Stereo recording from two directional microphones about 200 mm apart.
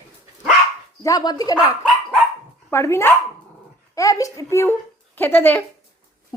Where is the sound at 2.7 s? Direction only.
15° left (ahead or behind).